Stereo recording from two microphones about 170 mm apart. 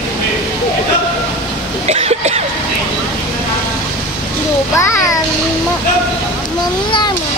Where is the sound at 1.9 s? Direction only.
40° right (ahead or behind).